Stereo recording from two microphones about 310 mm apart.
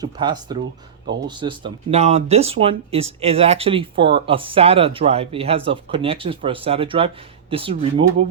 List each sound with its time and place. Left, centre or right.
0.0 s speech: centre